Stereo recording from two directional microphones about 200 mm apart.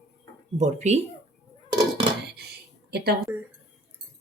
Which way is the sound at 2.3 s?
55° right (ahead or behind).